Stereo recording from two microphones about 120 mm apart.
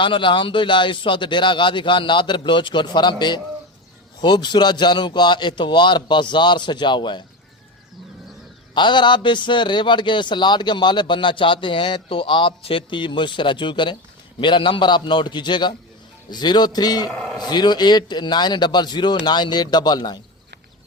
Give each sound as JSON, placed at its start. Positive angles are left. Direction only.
{"t": 0.0, "sound": "a man's voice", "side_deg": 45}
{"t": 8.7, "sound": "a man's voice", "side_deg": 40}
{"t": 17.1, "sound": "speech", "side_deg": 5}
{"t": 17.4, "sound": "a man's voice", "side_deg": 35}